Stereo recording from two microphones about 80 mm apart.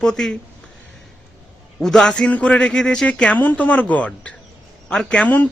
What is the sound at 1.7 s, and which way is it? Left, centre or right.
A man's voice, centre.